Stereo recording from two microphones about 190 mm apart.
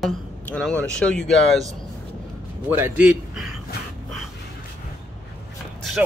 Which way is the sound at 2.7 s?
10° right (ahead or behind).